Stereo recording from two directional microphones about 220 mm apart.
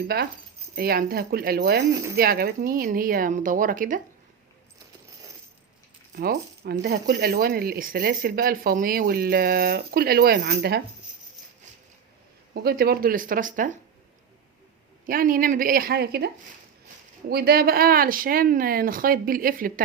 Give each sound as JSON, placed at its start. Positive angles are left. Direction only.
{"t": 0.1, "sound": "speech", "side_deg": -45}
{"t": 6.1, "sound": "speech", "side_deg": -45}
{"t": 12.5, "sound": "speech", "side_deg": -45}
{"t": 15.0, "sound": "speech", "side_deg": -40}